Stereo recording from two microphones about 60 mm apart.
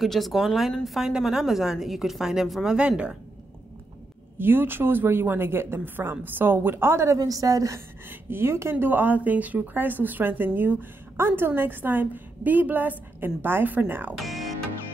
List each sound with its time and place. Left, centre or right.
0.0 s a woman's voice: centre
4.4 s speech: right
7.2 s a woman's voice: right
8.1 s speech: right
14.1 s a woman's voice: centre